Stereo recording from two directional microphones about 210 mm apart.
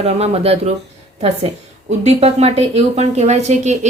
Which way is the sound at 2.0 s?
30° right (ahead or behind).